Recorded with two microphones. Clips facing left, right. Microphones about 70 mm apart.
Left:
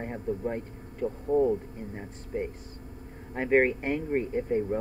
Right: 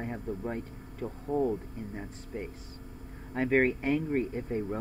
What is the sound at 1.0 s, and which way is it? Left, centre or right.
Speech, right.